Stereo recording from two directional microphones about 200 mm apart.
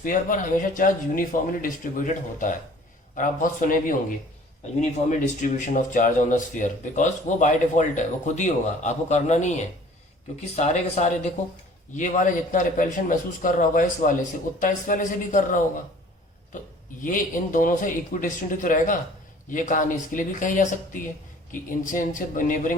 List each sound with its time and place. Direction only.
0.0 s speech: 40° left (ahead or behind)
17.0 s speech: 40° left (ahead or behind)